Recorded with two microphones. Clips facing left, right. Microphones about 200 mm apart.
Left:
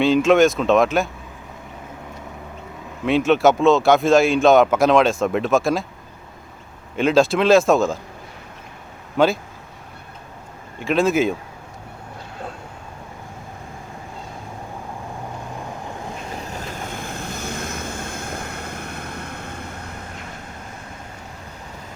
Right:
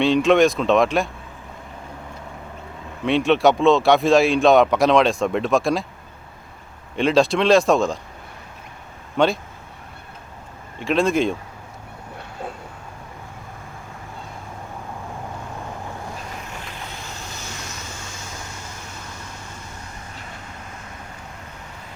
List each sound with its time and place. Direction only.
0.0 s speech: centre (ahead or behind)
3.0 s speech: centre (ahead or behind)
6.9 s speech: centre (ahead or behind)
9.1 s speech: centre (ahead or behind)
10.8 s speech: centre (ahead or behind)
16.4 s vehicle: 40° left (ahead or behind); by 19.6 s 60° left (ahead or behind)